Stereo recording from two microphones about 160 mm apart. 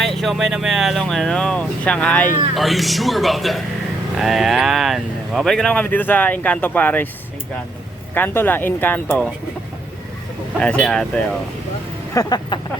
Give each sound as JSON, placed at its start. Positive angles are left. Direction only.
{"t": 0.0, "sound": "speech", "side_deg": 0}
{"t": 8.1, "sound": "speech", "side_deg": 15}
{"t": 10.6, "sound": "speech", "side_deg": 5}
{"t": 12.1, "sound": "speech", "side_deg": 25}